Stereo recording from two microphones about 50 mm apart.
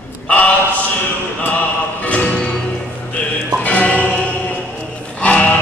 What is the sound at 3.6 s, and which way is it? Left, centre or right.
Music, left.